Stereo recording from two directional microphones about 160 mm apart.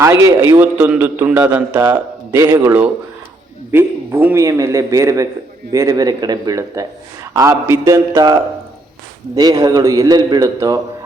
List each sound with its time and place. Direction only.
0.0 s a man's voice: 20° right (ahead or behind)